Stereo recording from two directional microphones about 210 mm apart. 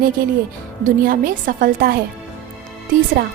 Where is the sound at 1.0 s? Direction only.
40° right (ahead or behind).